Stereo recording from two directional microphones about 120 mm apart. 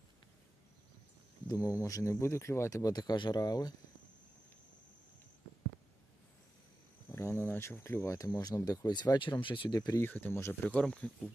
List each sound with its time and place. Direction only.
1.5 s speech: 30° left (ahead or behind)
7.1 s speech: 20° left (ahead or behind)
10.0 s speech: 15° left (ahead or behind)